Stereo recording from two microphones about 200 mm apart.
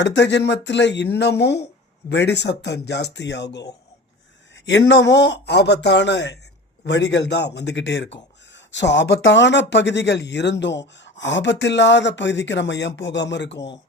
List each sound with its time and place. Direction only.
0.0 s speech: 60° left (ahead or behind)
4.6 s speech: 65° left (ahead or behind)